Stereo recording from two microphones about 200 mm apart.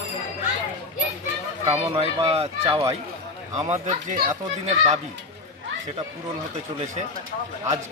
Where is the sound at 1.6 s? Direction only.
30° right (ahead or behind).